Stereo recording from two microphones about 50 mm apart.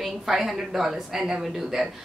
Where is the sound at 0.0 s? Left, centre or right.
Centre.